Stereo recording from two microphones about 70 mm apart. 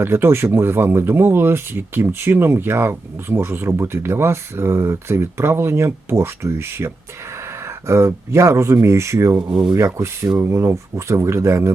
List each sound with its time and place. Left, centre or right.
0.0 s speech: right
9.4 s speech: centre
9.7 s speech: right